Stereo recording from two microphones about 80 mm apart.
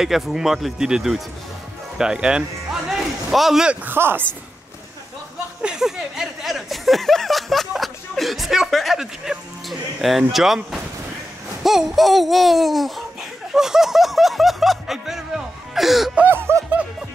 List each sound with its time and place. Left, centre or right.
0.0 s speech: centre
3.8 s speech: right
5.6 s speech: centre
13.5 s music: centre
16.3 s snicker: right